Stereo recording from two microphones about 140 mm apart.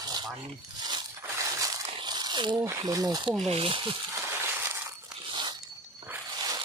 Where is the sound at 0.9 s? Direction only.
30° right (ahead or behind).